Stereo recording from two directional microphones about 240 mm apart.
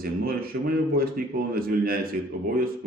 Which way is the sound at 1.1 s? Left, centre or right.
Right.